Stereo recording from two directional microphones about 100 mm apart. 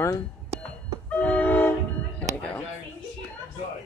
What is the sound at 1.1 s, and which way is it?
Train, 20° left (ahead or behind).